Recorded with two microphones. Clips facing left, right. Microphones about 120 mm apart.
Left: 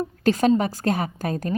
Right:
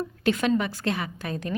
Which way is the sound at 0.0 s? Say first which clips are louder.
Left 5 dB; 40° left (ahead or behind).